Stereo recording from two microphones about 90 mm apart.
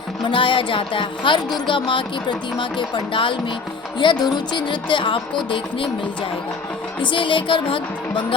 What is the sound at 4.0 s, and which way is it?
Speech, 60° left (ahead or behind).